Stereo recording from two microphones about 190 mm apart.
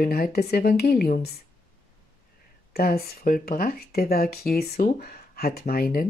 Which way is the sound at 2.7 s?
55° left (ahead or behind).